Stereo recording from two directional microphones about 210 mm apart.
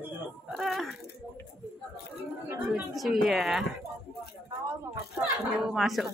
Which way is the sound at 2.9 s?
Centre (ahead or behind).